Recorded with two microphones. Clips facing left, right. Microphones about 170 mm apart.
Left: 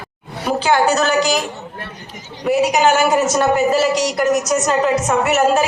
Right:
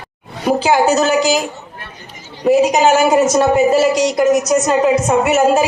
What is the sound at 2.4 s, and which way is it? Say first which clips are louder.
A woman's voice: right 3 dB; 30° right (ahead or behind).